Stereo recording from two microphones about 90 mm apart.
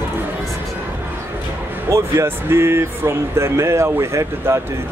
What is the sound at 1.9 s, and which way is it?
Speech, 30° right (ahead or behind).